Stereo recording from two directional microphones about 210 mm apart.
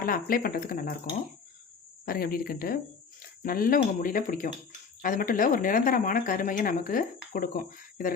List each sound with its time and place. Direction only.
0.0 s speech: 45° left (ahead or behind)
2.0 s speech: 45° left (ahead or behind)